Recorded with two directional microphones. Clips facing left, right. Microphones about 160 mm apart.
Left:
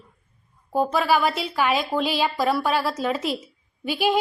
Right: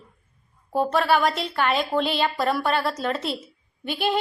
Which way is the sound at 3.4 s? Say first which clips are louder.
Left 3 dB; 10° left (ahead or behind).